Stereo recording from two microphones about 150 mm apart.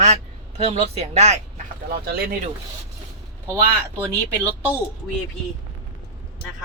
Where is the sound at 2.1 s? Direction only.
90° right.